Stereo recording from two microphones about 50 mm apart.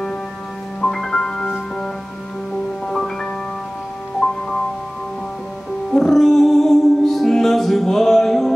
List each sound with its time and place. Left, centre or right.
0.8 s music: centre
4.2 s music: left
5.9 s music: centre